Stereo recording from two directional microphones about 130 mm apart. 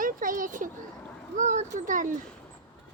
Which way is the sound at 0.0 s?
90° right.